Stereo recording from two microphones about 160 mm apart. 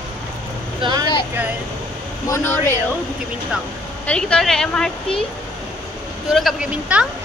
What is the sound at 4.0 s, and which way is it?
A woman's voice, 5° left (ahead or behind).